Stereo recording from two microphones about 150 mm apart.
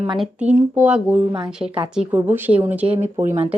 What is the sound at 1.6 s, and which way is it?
A woman's voice, 20° right (ahead or behind).